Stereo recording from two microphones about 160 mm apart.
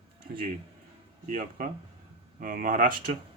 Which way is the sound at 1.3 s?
60° right (ahead or behind).